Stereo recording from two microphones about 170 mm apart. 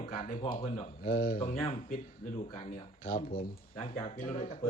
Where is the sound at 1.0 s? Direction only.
60° left (ahead or behind).